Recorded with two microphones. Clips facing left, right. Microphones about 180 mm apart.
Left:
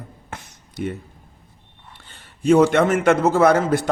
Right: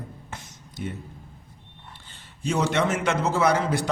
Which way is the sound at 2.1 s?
55° left (ahead or behind).